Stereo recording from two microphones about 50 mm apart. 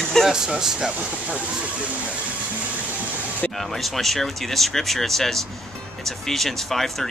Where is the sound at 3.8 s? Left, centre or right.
Centre.